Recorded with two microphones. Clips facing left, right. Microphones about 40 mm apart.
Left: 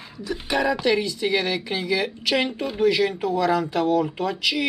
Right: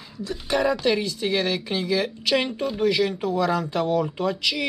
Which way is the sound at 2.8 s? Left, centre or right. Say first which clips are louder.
Left 2 dB; left.